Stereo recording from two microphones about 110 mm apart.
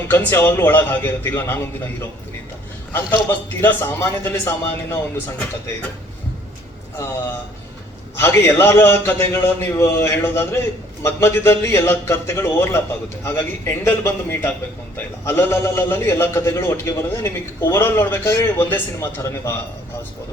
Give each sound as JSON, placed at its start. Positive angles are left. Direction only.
{"t": 0.1, "sound": "a man's voice", "side_deg": 20}
{"t": 3.2, "sound": "a man's voice", "side_deg": 20}
{"t": 6.9, "sound": "a man's voice", "side_deg": 25}